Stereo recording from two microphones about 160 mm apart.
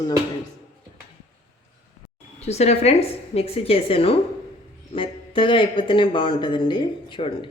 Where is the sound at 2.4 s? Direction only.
40° left (ahead or behind).